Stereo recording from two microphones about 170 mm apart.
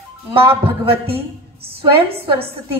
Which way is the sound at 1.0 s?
65° right (ahead or behind).